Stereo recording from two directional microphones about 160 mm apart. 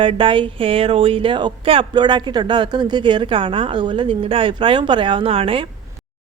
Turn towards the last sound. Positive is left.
turn(degrees=-35)  # may be behind; listen again after turning